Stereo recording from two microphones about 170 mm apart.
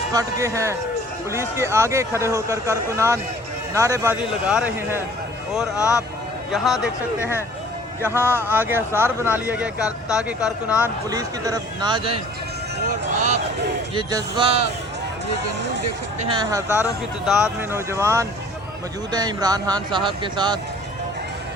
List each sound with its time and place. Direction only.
0.1 s a man's voice: 20° right (ahead or behind)
4.2 s speech: 5° right (ahead or behind)
5.7 s speech: 20° left (ahead or behind)
6.5 s speech: centre (ahead or behind)
8.0 s a man's voice: 15° right (ahead or behind)
11.1 s speech: 20° right (ahead or behind)
13.9 s speech: 25° right (ahead or behind)
16.3 s a man's voice: 20° right (ahead or behind)